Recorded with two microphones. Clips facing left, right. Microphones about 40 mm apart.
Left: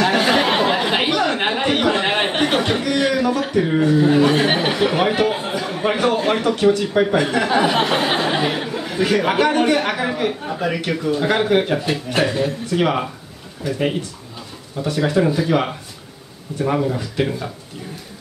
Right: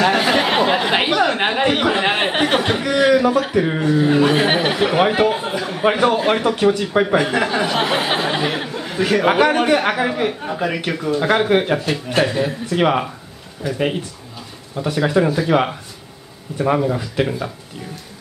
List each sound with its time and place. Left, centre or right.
0.0 s a sound: centre
3.8 s speech: centre
5.3 s a sound: centre
5.9 s a man's voice: centre
7.4 s a sound: centre
7.8 s speech: centre
9.2 s a man's voice: centre
11.8 s a man's voice: centre
16.5 s speech: centre